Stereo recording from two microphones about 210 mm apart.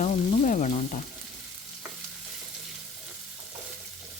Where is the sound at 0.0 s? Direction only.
35° left (ahead or behind).